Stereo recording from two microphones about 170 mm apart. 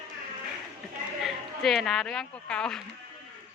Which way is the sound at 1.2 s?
Centre (ahead or behind).